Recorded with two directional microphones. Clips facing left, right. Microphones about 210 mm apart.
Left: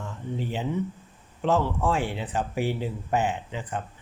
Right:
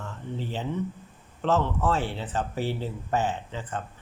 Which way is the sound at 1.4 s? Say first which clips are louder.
Left 1 dB; 15° left (ahead or behind).